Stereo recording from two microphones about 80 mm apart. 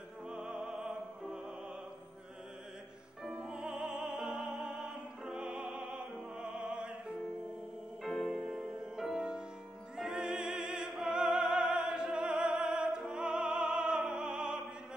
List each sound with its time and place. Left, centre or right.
0.5 s opera: right
3.3 s music: centre
4.6 s opera: centre
8.3 s music: centre
9.9 s opera: centre